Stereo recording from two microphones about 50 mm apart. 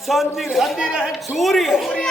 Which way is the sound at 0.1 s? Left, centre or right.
Centre.